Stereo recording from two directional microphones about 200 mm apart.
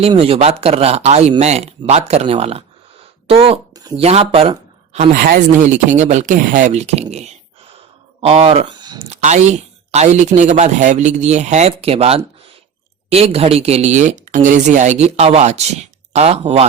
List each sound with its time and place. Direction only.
0.0 s speech: 30° right (ahead or behind)
3.8 s a sound: 20° right (ahead or behind)
4.0 s speech: 30° right (ahead or behind)
5.1 s speech: 40° right (ahead or behind)
8.2 s speech: 30° right (ahead or behind)